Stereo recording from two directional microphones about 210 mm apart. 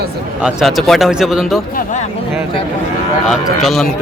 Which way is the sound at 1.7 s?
35° left (ahead or behind).